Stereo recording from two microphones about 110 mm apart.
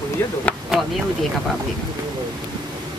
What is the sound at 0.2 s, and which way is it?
Speech, 20° left (ahead or behind).